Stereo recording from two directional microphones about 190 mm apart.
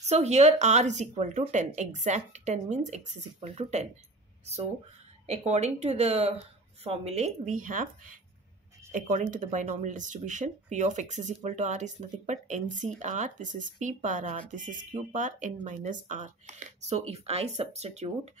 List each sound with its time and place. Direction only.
0.0 s speech: 35° right (ahead or behind)
5.2 s speech: 35° right (ahead or behind)
8.9 s speech: 45° right (ahead or behind)